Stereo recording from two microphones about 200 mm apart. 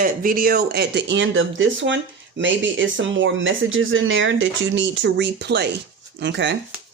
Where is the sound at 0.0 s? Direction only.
45° right (ahead or behind); by 6.6 s 60° right (ahead or behind).